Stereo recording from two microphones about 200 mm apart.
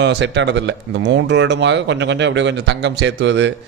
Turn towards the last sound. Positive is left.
turn(degrees=-65)  # may be behind; listen again after turning